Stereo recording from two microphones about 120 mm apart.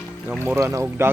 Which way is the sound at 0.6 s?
25° right (ahead or behind).